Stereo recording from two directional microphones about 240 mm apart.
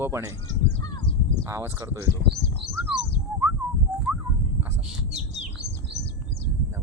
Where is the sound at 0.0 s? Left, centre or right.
Centre.